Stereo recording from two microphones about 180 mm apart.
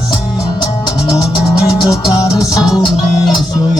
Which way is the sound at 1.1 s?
20° left (ahead or behind).